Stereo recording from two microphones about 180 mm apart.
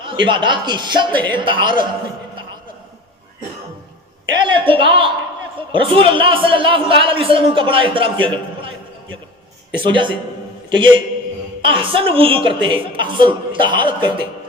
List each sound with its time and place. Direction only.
0.0 s a man's voice: 25° right (ahead or behind)
4.4 s a man's voice: 30° right (ahead or behind)
9.8 s a man's voice: 25° right (ahead or behind)